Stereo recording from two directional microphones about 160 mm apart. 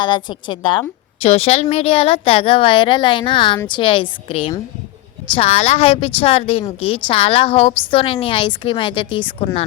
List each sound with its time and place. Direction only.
0.0 s a woman's voice: 30° left (ahead or behind)